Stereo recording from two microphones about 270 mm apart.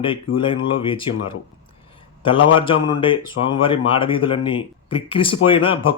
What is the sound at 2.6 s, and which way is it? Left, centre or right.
Speech, centre.